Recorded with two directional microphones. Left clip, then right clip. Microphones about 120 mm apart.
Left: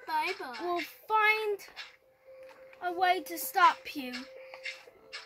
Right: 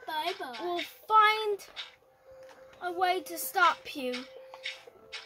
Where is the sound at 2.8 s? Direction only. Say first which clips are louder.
Left 1 dB; 30° right (ahead or behind).